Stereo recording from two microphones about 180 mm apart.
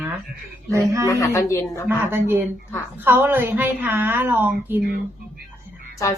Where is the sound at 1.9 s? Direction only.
10° right (ahead or behind).